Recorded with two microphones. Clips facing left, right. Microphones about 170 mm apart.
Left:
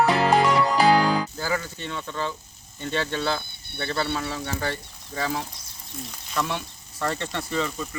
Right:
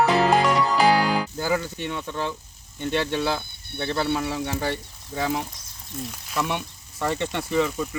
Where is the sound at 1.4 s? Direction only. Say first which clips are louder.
Right 3 dB; 15° right (ahead or behind).